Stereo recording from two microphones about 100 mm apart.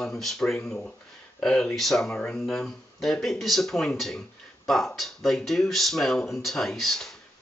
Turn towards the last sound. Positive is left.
turn(degrees=0)  # may be behind; listen again after turning